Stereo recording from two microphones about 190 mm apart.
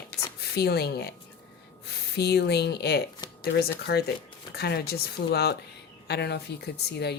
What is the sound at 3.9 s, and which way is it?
Speech, 65° left (ahead or behind).